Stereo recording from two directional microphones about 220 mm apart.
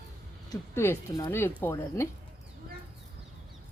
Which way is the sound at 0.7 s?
10° left (ahead or behind).